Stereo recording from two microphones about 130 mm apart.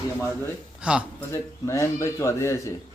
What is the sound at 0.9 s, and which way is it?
Speech, 10° right (ahead or behind).